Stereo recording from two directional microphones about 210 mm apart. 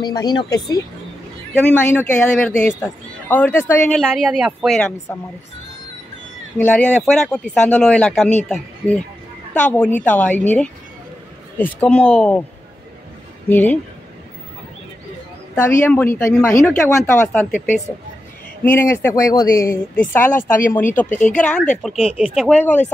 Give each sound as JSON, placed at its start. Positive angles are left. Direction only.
{"t": 0.0, "sound": "speech", "side_deg": 20}
{"t": 1.5, "sound": "speech", "side_deg": 10}
{"t": 4.0, "sound": "speech", "side_deg": -5}
{"t": 6.6, "sound": "speech", "side_deg": 5}
{"t": 11.5, "sound": "speech", "side_deg": 5}
{"t": 13.5, "sound": "speech", "side_deg": 10}
{"t": 15.5, "sound": "speech", "side_deg": 5}
{"t": 22.1, "sound": "speech", "side_deg": -5}
{"t": 22.6, "sound": "speech", "side_deg": 10}